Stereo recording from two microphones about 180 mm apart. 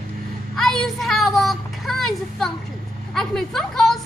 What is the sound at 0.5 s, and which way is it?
Speech, centre (ahead or behind).